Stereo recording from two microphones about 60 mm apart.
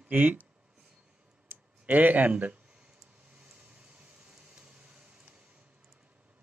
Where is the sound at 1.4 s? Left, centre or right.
Right.